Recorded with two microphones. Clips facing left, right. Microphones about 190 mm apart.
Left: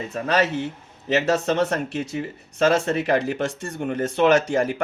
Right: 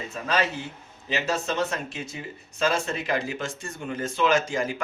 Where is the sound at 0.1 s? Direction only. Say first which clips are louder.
Left 5 dB; 60° left (ahead or behind).